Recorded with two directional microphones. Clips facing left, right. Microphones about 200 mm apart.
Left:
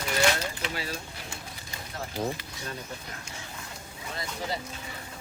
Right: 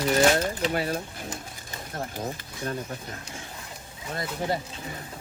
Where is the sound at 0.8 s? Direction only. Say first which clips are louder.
Right 7 dB; 50° right (ahead or behind).